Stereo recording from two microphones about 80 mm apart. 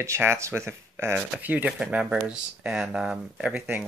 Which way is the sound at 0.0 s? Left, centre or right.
Right.